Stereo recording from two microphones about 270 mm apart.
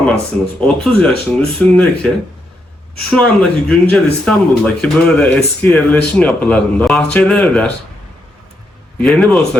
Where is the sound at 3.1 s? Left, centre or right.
Centre.